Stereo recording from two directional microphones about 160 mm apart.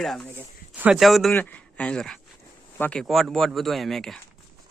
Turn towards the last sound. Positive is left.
turn(degrees=0)  # may be behind; listen again after turning